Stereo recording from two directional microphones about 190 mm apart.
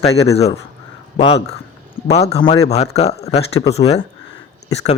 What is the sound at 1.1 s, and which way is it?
Speech, 30° left (ahead or behind).